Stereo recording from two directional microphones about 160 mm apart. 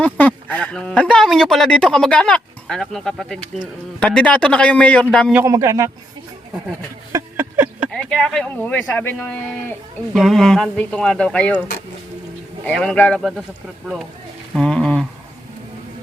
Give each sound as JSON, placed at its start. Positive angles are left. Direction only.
{"t": 0.0, "sound": "speech", "side_deg": 10}
{"t": 5.3, "sound": "speech", "side_deg": -15}
{"t": 7.1, "sound": "a sound", "side_deg": -15}
{"t": 7.9, "sound": "speech", "side_deg": 5}
{"t": 10.2, "sound": "speech", "side_deg": 0}
{"t": 12.6, "sound": "speech", "side_deg": 5}
{"t": 14.5, "sound": "speech", "side_deg": 5}